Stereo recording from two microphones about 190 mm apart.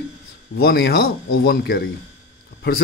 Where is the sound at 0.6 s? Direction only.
55° left (ahead or behind).